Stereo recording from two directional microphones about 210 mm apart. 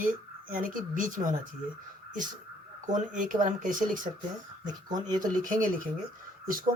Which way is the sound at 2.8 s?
35° right (ahead or behind).